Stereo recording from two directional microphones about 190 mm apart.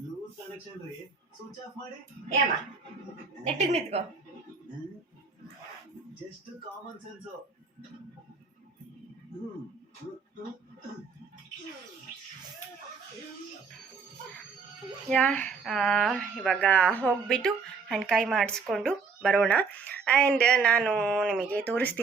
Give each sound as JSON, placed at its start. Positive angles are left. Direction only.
{"t": 3.4, "sound": "a woman's voice", "side_deg": -35}
{"t": 15.1, "sound": "speech", "side_deg": 10}